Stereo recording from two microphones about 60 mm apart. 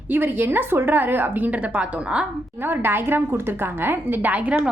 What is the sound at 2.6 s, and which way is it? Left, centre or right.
A woman's voice, right.